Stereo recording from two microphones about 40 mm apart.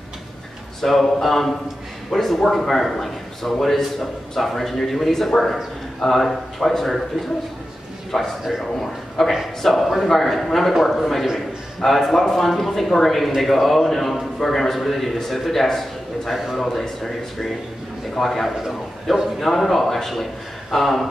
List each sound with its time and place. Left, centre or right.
0.7 s a man's voice: centre
8.1 s a man's voice: centre